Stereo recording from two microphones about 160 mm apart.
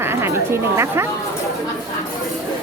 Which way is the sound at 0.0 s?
15° right (ahead or behind).